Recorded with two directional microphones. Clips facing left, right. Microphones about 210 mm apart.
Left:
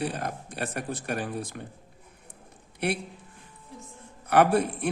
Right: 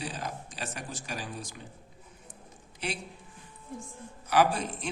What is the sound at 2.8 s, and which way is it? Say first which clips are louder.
Speech: left 8 dB; 60° left (ahead or behind).